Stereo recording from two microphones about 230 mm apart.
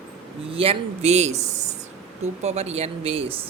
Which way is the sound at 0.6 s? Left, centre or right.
Right.